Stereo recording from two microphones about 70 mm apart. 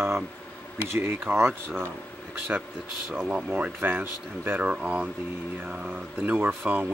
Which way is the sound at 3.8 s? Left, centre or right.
Right.